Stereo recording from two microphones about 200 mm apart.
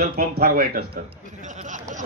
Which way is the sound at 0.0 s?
50° right (ahead or behind).